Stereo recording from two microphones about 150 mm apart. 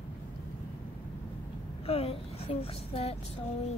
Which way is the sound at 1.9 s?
40° left (ahead or behind).